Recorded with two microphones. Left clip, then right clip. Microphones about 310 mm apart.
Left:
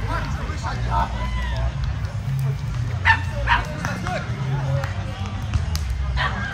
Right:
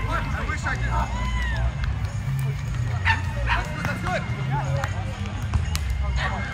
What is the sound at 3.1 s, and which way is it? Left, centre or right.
Bow-wow, left.